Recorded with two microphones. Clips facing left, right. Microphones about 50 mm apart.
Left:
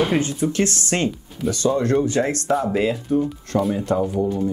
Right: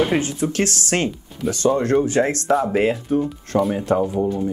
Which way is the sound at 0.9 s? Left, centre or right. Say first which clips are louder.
Right 1 dB; right.